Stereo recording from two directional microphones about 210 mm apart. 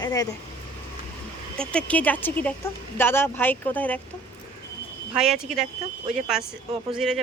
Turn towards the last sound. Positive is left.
turn(degrees=0)  # may be behind; listen again after turning